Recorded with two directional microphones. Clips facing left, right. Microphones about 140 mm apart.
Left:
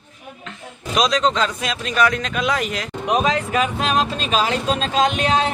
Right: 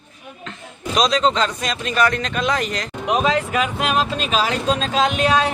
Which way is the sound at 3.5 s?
35° left (ahead or behind).